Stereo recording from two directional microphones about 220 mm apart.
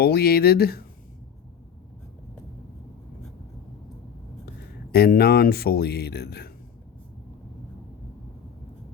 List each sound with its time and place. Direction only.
0.0 s speech: 45° left (ahead or behind)
4.9 s speech: 45° left (ahead or behind)